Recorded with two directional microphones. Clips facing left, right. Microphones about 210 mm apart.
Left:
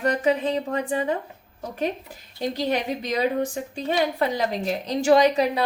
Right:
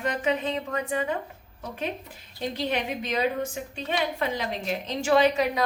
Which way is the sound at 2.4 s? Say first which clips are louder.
Left 4 dB; 40° left (ahead or behind).